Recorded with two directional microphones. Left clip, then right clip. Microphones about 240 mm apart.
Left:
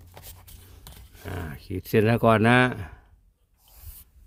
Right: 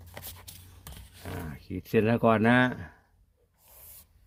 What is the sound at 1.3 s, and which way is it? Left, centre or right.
Speech, left.